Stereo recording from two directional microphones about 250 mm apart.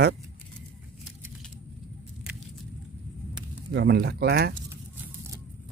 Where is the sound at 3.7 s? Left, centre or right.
Right.